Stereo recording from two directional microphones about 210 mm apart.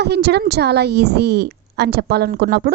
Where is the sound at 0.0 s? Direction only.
50° right (ahead or behind).